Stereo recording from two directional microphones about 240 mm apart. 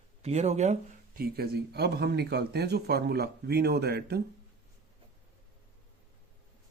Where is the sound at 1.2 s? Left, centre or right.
Right.